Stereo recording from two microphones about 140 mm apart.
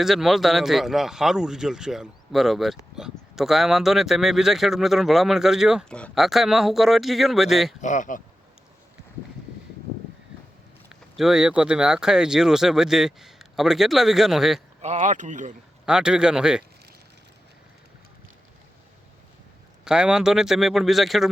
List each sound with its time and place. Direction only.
0.0 s speech: centre (ahead or behind)
7.8 s speech: 60° left (ahead or behind)
11.2 s speech: 5° right (ahead or behind)
14.8 s speech: 50° right (ahead or behind)
15.9 s speech: 5° right (ahead or behind)
19.8 s speech: 5° right (ahead or behind)